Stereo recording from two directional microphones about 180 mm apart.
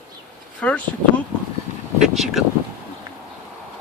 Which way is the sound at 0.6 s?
5° left (ahead or behind).